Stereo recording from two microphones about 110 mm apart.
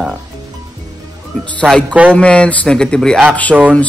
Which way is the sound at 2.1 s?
10° left (ahead or behind).